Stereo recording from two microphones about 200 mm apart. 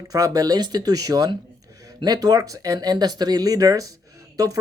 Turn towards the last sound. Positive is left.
turn(degrees=-15)  # may be behind; listen again after turning